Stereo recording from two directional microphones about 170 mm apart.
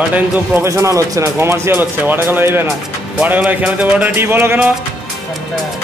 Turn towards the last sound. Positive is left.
turn(degrees=-10)  # may be behind; listen again after turning